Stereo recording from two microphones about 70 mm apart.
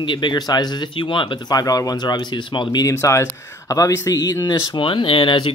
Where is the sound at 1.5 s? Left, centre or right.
Left.